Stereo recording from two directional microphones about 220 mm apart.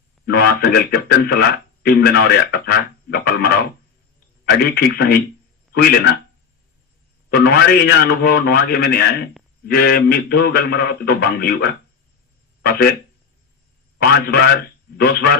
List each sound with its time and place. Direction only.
0.3 s speech: 45° left (ahead or behind)
7.3 s speech: 45° left (ahead or behind)
14.0 s speech: 45° left (ahead or behind)